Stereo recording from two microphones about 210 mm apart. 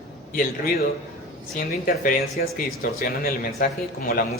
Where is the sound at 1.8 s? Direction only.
45° left (ahead or behind).